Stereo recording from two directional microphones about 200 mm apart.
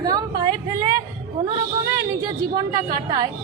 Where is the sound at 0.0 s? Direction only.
20° right (ahead or behind).